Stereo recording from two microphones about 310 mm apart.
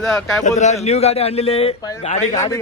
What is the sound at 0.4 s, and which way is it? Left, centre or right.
A man's voice, left.